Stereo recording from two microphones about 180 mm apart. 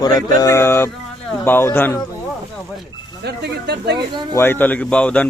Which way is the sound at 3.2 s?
65° right (ahead or behind).